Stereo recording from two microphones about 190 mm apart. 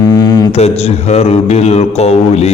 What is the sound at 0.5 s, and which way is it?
A man's voice, 35° left (ahead or behind).